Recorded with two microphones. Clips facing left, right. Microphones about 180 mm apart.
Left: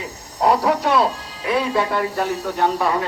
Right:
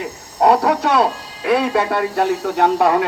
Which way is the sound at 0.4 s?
60° right (ahead or behind).